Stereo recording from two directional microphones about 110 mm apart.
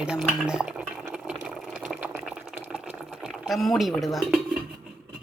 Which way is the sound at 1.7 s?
10° right (ahead or behind).